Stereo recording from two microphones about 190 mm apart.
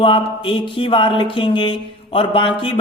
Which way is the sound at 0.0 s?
25° left (ahead or behind).